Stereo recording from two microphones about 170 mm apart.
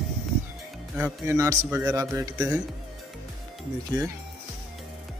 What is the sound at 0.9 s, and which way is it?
A man's voice, 15° right (ahead or behind).